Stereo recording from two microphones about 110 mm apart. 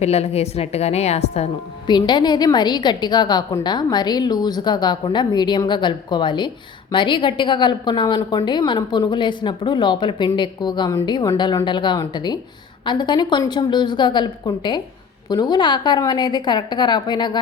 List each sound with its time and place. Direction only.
0.0 s a woman's voice: 80° left
1.9 s a woman's voice: 40° left (ahead or behind)